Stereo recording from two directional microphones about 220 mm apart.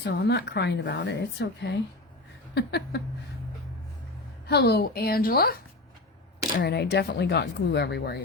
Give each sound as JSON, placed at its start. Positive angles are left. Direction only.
{"t": 0.0, "sound": "a woman's voice", "side_deg": 50}
{"t": 4.4, "sound": "a woman's voice", "side_deg": 50}